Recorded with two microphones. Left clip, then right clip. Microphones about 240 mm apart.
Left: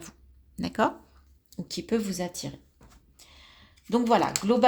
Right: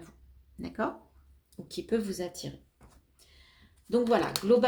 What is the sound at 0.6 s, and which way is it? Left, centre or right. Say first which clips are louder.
Speech: left 7 dB; left.